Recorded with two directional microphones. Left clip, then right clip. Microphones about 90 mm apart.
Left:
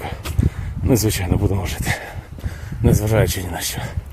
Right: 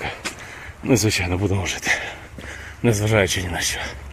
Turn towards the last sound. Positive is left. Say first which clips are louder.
# right 2 dB
turn(degrees=30)  # may be behind; listen again after turning